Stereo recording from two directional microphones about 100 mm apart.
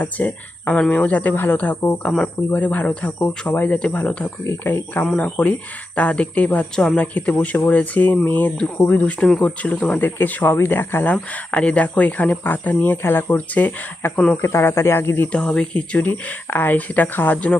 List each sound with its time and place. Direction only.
0.0 s speech: 15° left (ahead or behind)
15.3 s speech: 10° left (ahead or behind)